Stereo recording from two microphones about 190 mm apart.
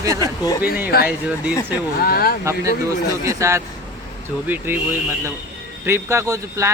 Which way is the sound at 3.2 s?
15° right (ahead or behind).